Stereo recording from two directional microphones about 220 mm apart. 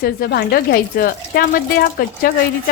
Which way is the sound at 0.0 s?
40° left (ahead or behind).